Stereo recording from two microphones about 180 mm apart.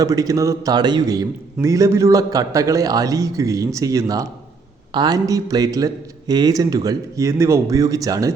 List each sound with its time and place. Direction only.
0.0 s speech: 20° right (ahead or behind)